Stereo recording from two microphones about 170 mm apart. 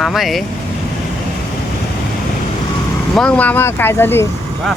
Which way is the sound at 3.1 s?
5° left (ahead or behind).